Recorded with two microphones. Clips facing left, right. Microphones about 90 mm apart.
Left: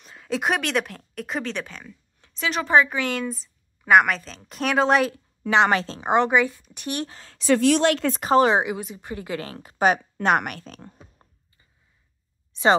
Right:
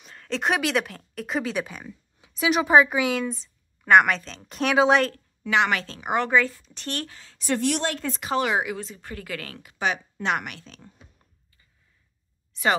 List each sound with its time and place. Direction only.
0.0 s speech: 5° left (ahead or behind)
5.5 s speech: 30° left (ahead or behind)
7.3 s a woman's voice: 80° left
8.2 s speech: 35° left (ahead or behind)
8.7 s speech: 15° left (ahead or behind); by 9.9 s 40° left (ahead or behind)
10.1 s a woman's voice: 50° left (ahead or behind)